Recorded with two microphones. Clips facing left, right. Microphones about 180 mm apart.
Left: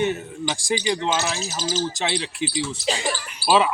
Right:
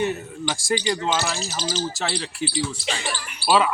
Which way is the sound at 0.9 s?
20° left (ahead or behind).